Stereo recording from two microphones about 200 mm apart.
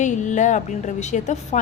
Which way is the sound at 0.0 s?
40° left (ahead or behind).